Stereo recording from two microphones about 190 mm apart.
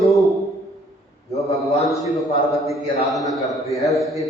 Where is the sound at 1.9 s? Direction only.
Centre (ahead or behind).